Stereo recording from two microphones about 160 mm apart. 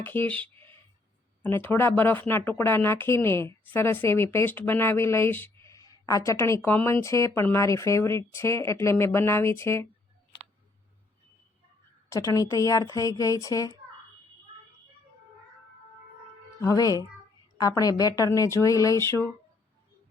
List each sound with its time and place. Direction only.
0.0 s speech: 10° left (ahead or behind)
12.0 s speech: 20° left (ahead or behind)
16.6 s speech: 20° left (ahead or behind)